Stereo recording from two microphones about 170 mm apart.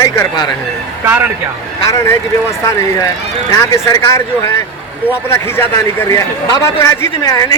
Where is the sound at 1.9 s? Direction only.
15° left (ahead or behind).